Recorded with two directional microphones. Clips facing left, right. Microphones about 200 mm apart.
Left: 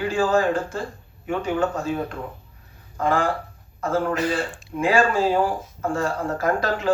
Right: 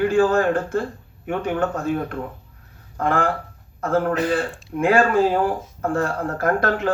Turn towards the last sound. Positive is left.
turn(degrees=-60)  # may be behind; listen again after turning